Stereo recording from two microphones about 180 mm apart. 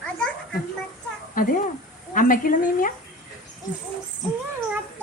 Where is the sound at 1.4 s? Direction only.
50° left (ahead or behind).